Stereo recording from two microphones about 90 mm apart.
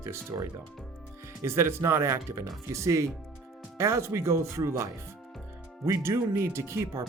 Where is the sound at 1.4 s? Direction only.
30° right (ahead or behind).